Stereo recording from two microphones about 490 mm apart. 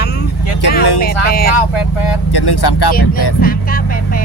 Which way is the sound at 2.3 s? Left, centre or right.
Left.